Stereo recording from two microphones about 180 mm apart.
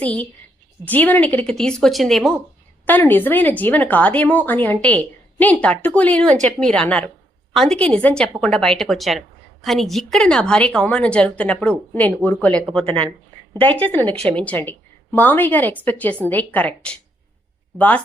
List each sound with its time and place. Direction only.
0.0 s a woman's voice: 10° left (ahead or behind)
12.8 s speech: 30° right (ahead or behind)
13.6 s speech: 10° left (ahead or behind)